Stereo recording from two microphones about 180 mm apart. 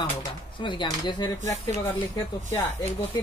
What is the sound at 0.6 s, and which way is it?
Speech, 25° left (ahead or behind).